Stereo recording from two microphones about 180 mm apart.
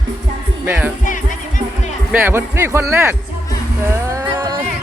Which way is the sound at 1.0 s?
45° left (ahead or behind).